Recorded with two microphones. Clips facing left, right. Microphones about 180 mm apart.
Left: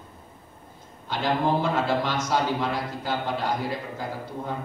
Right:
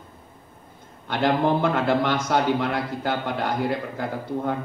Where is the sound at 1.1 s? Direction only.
60° right (ahead or behind).